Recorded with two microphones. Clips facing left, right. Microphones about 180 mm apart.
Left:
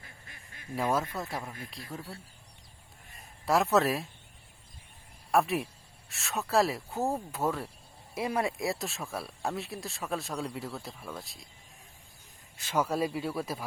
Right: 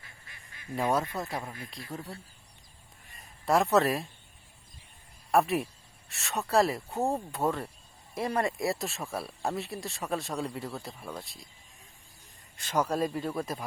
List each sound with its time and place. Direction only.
0.0 s honk: 45° left (ahead or behind)
0.8 s speech: centre (ahead or behind)
3.4 s speech: centre (ahead or behind)
5.3 s speech: centre (ahead or behind)
12.5 s speech: 5° left (ahead or behind)